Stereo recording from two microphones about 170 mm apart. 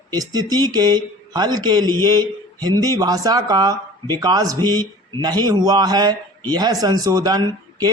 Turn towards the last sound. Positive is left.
turn(degrees=-25)  # may be behind; listen again after turning